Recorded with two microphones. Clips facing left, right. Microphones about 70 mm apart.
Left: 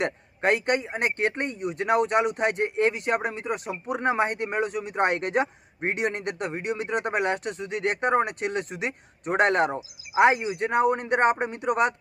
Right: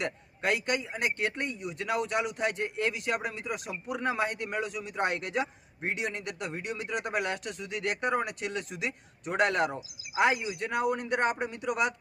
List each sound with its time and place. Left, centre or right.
0.0 s speech: left